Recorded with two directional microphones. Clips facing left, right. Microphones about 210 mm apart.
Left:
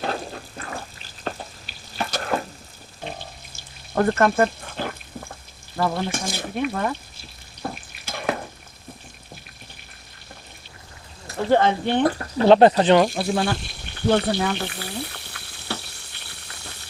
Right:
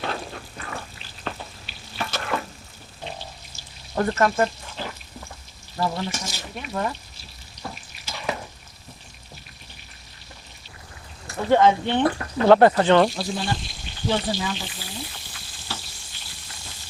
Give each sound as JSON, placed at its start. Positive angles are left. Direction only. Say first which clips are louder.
{"t": 0.0, "sound": "water", "louder": "left 2 dB", "side_deg": 40}
{"t": 1.2, "sound": "frying", "louder": "left 2 dB", "side_deg": 40}
{"t": 3.1, "sound": "water", "louder": "left 2 dB", "side_deg": 55}
{"t": 5.7, "sound": "speech", "louder": "left 3 dB", "side_deg": 55}
{"t": 7.6, "sound": "frying", "louder": "left 5 dB", "side_deg": 55}
{"t": 11.5, "sound": "speech", "louder": "right 1 dB", "side_deg": 45}
{"t": 12.5, "sound": "speech", "louder": "left 1 dB", "side_deg": 20}
{"t": 13.1, "sound": "a sound", "louder": "left 4 dB", "side_deg": 60}